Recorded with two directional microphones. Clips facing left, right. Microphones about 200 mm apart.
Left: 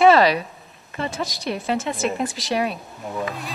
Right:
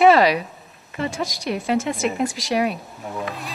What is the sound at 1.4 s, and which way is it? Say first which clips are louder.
A woman's voice: right 3 dB; 30° left (ahead or behind).